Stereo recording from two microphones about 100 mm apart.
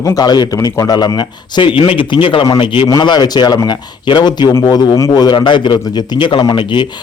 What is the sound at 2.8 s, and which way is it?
A man's voice, 45° left (ahead or behind).